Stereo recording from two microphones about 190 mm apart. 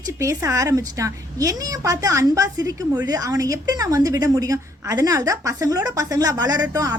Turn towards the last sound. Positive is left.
turn(degrees=-20)  # may be behind; listen again after turning